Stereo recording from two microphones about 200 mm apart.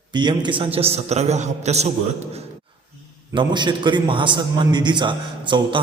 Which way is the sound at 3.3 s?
20° right (ahead or behind).